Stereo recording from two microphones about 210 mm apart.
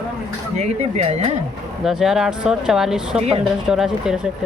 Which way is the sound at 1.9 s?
Centre (ahead or behind).